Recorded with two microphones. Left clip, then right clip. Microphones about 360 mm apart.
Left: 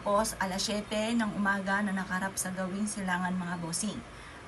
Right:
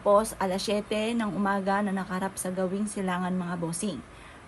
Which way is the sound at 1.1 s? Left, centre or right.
Right.